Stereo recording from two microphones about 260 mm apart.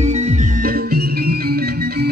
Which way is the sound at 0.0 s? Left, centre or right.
Right.